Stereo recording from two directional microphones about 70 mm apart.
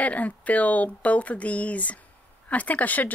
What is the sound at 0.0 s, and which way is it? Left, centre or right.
Speech, left.